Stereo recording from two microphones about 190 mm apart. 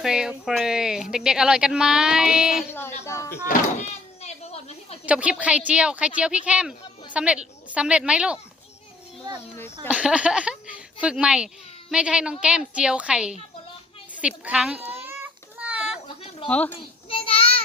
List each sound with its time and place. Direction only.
0.0 s a woman's voice: 5° right (ahead or behind)
3.0 s speech: 15° left (ahead or behind)
3.4 s a sound: 35° left (ahead or behind)
5.0 s a woman's voice: 5° right (ahead or behind)
9.9 s a woman's voice: 5° right (ahead or behind)
14.2 s a sound: 5° right (ahead or behind)
16.0 s a sound: 25° left (ahead or behind)
16.5 s speech: 5° left (ahead or behind)
17.1 s child singing: 30° left (ahead or behind)